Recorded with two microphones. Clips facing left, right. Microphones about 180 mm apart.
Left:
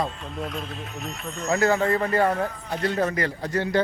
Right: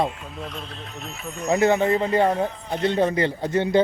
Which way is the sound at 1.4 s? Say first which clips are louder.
Right 3 dB; 20° right (ahead or behind).